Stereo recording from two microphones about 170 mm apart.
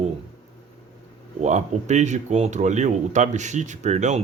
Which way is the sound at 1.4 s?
45° right (ahead or behind).